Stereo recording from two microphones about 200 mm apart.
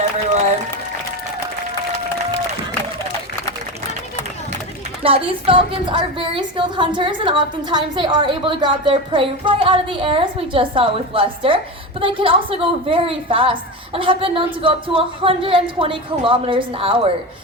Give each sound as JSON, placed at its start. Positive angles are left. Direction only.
{"t": 5.0, "sound": "speech", "side_deg": -25}